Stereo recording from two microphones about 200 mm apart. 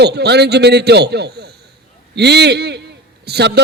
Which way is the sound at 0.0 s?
55° right (ahead or behind).